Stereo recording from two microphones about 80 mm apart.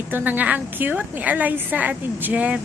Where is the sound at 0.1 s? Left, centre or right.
Right.